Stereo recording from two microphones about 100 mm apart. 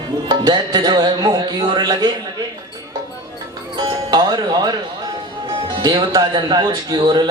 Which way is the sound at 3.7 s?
45° right (ahead or behind).